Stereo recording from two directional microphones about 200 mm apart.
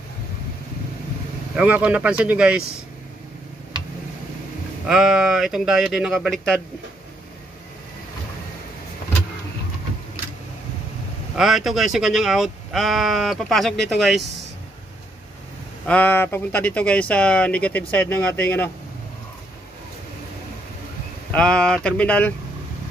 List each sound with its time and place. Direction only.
1.5 s speech: 5° right (ahead or behind)
4.8 s speech: 5° right (ahead or behind)
11.3 s speech: centre (ahead or behind)
15.9 s speech: 10° left (ahead or behind)
21.3 s speech: 5° left (ahead or behind)